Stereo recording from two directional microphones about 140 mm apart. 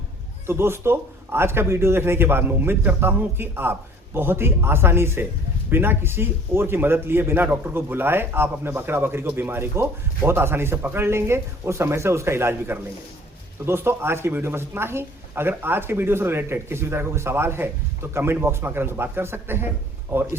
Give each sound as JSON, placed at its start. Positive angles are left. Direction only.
{"t": 0.4, "sound": "speech", "side_deg": -15}